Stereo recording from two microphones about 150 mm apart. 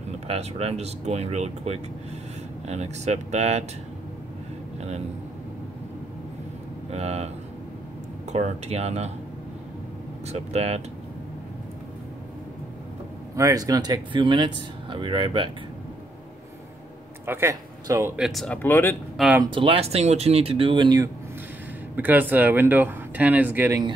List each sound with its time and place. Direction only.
0.3 s speech: 40° right (ahead or behind)
6.9 s speech: 45° right (ahead or behind)
8.3 s speech: 45° right (ahead or behind)
10.2 s speech: 45° right (ahead or behind)
13.4 s speech: 20° right (ahead or behind)
17.3 s speech: 20° right (ahead or behind)
18.1 s speech: centre (ahead or behind)
18.6 s speech: 15° left (ahead or behind)
19.1 s speech: 5° right (ahead or behind)
19.4 s speech: 35° right (ahead or behind)
21.9 s speech: 15° right (ahead or behind)